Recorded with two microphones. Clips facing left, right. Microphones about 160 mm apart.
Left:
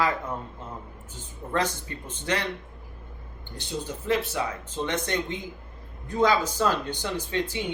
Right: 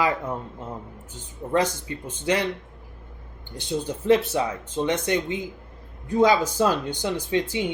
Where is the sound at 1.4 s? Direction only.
20° right (ahead or behind).